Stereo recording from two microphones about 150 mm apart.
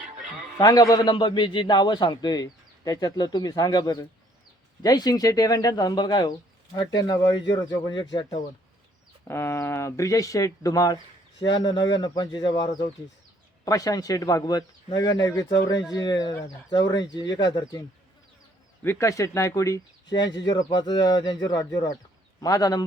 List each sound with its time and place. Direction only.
0.6 s speech: 25° left (ahead or behind)
9.2 s speech: 15° left (ahead or behind)
18.8 s a man's voice: 15° left (ahead or behind)